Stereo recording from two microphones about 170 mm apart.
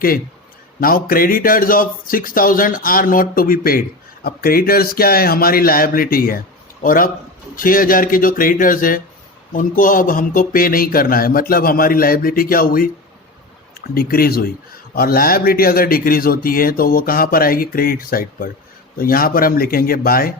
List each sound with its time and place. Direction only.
0.8 s a man's voice: 55° left (ahead or behind)
13.9 s a man's voice: 60° left (ahead or behind)